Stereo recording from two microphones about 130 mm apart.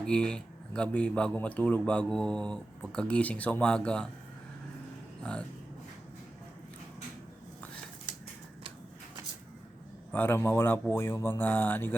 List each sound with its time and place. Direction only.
0.0 s a man's voice: 5° left (ahead or behind)
5.2 s a man's voice: 10° left (ahead or behind)
10.1 s a man's voice: 15° left (ahead or behind)